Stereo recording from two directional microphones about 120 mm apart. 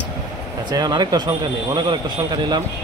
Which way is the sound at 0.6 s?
35° right (ahead or behind).